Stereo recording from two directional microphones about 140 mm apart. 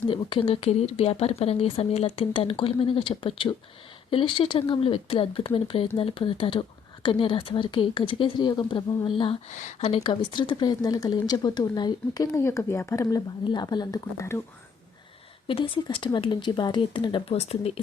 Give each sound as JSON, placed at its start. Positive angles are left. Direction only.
{"t": 0.1, "sound": "speech", "side_deg": 40}
{"t": 9.5, "sound": "speech", "side_deg": 60}
{"t": 15.4, "sound": "speech", "side_deg": 40}